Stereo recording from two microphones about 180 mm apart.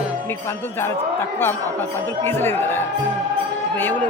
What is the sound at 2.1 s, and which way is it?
Speech, 10° left (ahead or behind).